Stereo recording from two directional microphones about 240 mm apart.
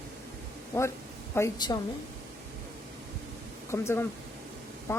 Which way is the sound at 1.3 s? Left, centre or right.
Centre.